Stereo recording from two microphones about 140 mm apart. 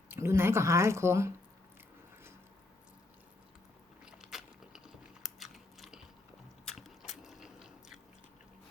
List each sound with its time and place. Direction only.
0.1 s speech: 20° right (ahead or behind)
4.0 s a sound: 5° right (ahead or behind)
5.2 s biting: centre (ahead or behind)